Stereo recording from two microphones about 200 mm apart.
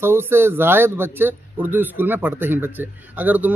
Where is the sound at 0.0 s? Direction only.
10° right (ahead or behind).